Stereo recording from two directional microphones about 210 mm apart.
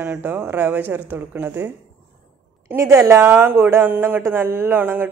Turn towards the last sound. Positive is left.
turn(degrees=-10)  # may be behind; listen again after turning